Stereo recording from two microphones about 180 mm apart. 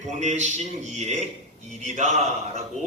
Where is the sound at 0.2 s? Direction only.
40° right (ahead or behind).